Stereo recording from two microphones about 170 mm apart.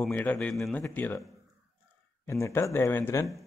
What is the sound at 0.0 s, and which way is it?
Speech, 10° left (ahead or behind).